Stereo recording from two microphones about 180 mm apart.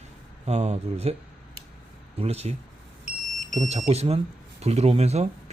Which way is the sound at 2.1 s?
35° right (ahead or behind).